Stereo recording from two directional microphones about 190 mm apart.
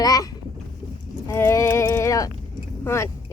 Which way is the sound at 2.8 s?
15° left (ahead or behind).